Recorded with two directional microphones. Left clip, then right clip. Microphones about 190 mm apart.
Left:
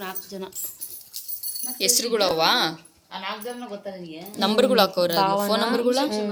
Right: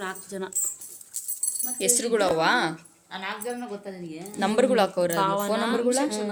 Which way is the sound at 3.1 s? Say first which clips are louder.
Left 1 dB; 60° right (ahead or behind).